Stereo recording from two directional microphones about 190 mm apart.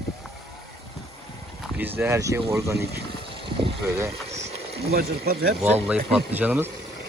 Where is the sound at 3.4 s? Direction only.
25° right (ahead or behind).